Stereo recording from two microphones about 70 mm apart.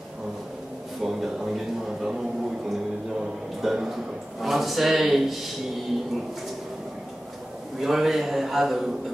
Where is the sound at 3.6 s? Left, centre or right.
Centre.